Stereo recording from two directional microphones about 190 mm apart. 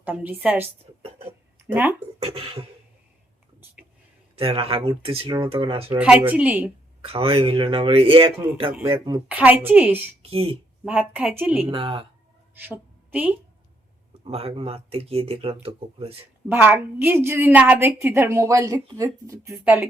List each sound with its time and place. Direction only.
0.0 s a woman's voice: 10° right (ahead or behind)
2.1 s speech: 25° right (ahead or behind)
4.4 s speech: 30° right (ahead or behind)
5.9 s a woman's voice: 10° right (ahead or behind)
7.0 s speech: 30° right (ahead or behind)
9.3 s a woman's voice: 10° right (ahead or behind)
10.2 s speech: 30° right (ahead or behind)
11.2 s a woman's voice: 10° right (ahead or behind)
11.7 s speech: 30° right (ahead or behind)
12.5 s a sound: 10° right (ahead or behind)
14.3 s speech: 30° right (ahead or behind)
16.5 s a woman's voice: 10° right (ahead or behind)